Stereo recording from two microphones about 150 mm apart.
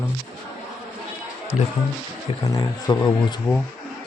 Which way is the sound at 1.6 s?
50° left (ahead or behind).